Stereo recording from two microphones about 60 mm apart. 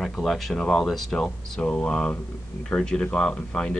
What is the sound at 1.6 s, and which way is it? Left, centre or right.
Speech, centre.